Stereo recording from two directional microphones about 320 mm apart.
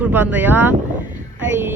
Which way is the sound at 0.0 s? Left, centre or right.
Centre.